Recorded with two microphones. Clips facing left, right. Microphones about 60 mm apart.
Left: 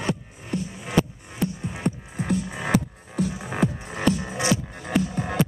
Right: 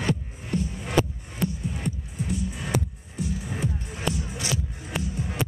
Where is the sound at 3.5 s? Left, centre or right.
Left.